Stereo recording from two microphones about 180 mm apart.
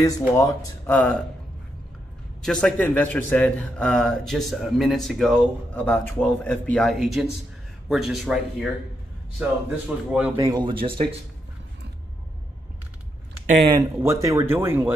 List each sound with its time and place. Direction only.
0.4 s speech: 15° left (ahead or behind)
2.4 s a man's voice: 5° left (ahead or behind)
10.3 s speech: 20° right (ahead or behind)
13.7 s speech: 20° right (ahead or behind)